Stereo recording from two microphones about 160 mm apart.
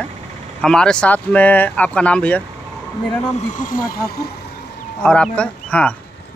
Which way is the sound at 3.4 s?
50° left (ahead or behind).